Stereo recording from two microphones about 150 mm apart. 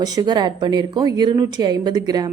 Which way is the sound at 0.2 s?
30° right (ahead or behind).